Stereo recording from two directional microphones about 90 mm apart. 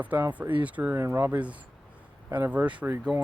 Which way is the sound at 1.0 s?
30° right (ahead or behind).